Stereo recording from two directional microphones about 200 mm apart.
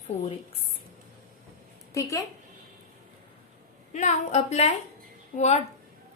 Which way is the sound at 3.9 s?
35° left (ahead or behind).